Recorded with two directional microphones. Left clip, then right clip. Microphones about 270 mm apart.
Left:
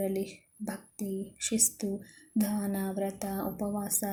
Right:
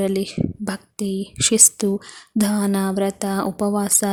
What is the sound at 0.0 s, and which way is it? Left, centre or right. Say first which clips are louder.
Speech: right 11 dB; right.